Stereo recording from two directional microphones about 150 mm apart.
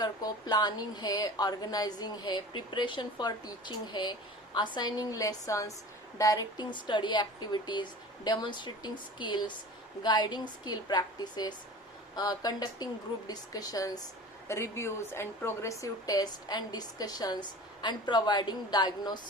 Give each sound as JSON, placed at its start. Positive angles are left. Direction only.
{"t": 0.0, "sound": "speech", "side_deg": 25}